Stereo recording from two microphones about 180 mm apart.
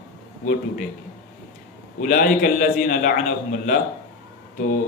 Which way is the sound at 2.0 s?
50° left (ahead or behind).